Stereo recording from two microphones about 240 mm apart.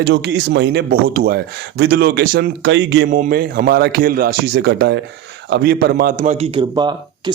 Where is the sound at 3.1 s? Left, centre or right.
Right; by 7.3 s centre.